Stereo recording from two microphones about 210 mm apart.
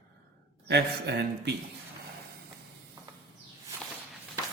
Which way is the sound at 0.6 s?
50° right (ahead or behind).